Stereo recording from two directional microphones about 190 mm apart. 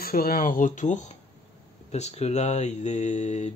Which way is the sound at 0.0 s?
50° left (ahead or behind).